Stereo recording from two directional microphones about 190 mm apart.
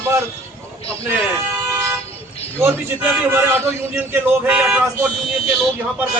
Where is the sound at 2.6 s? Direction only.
10° right (ahead or behind).